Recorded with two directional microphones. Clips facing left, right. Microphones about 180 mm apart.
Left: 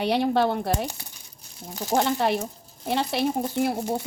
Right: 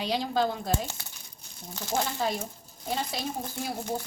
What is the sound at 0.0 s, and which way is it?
Speech, 65° left (ahead or behind).